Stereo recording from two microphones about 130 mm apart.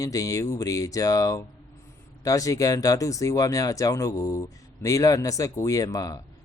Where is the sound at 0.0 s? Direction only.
25° left (ahead or behind).